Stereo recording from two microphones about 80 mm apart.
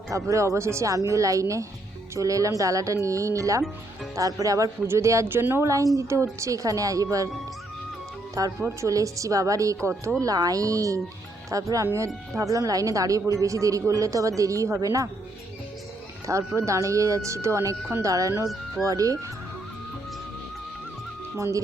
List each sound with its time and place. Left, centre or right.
0.1 s a woman's voice: right
8.4 s a woman's voice: right
16.6 s a woman's voice: right
21.3 s speech: right